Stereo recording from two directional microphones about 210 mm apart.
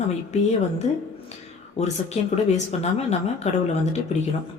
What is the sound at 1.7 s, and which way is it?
A woman's voice, 30° left (ahead or behind).